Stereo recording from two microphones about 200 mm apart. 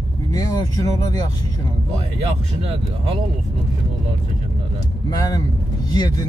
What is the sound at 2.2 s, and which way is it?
Speech, 30° right (ahead or behind).